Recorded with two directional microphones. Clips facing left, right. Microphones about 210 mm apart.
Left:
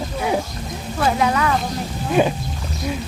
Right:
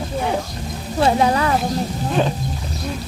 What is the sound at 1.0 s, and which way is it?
Speech, 30° right (ahead or behind).